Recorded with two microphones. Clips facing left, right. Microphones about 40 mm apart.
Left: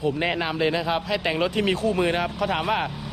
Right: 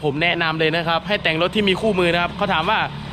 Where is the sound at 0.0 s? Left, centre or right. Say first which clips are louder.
Right 5 dB; right.